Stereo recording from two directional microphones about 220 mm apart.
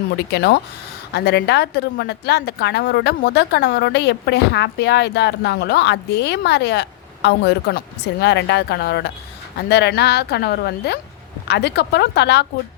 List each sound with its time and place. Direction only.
0.2 s a woman's voice: 50° left (ahead or behind)